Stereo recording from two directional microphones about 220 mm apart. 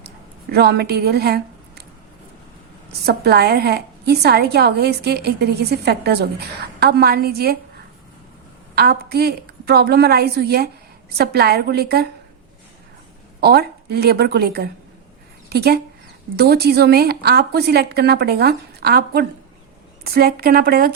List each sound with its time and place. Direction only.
0.5 s a woman's voice: 45° right (ahead or behind)
3.1 s a woman's voice: 45° right (ahead or behind)
8.7 s a woman's voice: 45° right (ahead or behind)
13.4 s a woman's voice: 45° right (ahead or behind)